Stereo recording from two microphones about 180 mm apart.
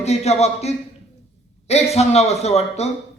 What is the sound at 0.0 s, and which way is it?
A man's voice, 35° left (ahead or behind).